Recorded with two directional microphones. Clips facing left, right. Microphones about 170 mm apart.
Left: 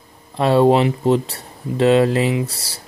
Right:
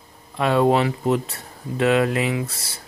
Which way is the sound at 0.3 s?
30° left (ahead or behind).